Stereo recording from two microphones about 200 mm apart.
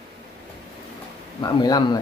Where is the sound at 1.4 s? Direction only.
20° left (ahead or behind).